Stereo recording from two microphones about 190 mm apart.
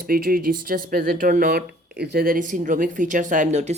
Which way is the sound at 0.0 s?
50° right (ahead or behind).